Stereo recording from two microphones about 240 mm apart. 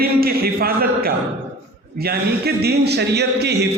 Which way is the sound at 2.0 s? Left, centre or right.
Right.